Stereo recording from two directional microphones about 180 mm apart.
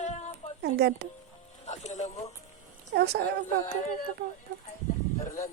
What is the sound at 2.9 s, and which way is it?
Speech, 65° right (ahead or behind).